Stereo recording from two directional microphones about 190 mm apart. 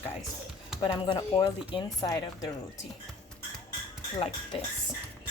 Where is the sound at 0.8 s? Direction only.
25° left (ahead or behind).